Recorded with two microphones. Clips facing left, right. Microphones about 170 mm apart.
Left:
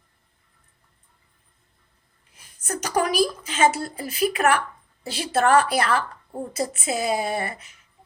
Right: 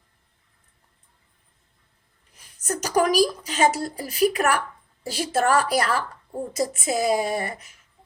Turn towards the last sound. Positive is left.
turn(degrees=-40)  # may be behind; listen again after turning